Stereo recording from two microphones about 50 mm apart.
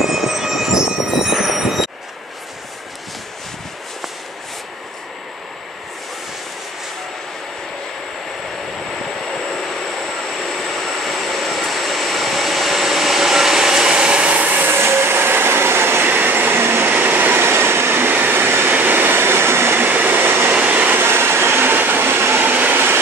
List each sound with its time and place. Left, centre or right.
0.0 s train: centre
10.3 s vehicle: centre; by 16.9 s right
16.9 s train: right
18.8 s vehicle: right
19.8 s vehicle: right
20.6 s vehicle: right
21.0 s train: right
22.5 s vehicle: right